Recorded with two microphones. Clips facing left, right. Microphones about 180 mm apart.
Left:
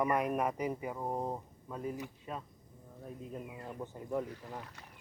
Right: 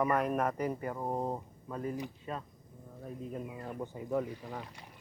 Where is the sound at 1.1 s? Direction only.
10° right (ahead or behind).